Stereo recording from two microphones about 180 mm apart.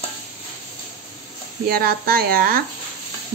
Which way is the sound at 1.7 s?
55° right (ahead or behind).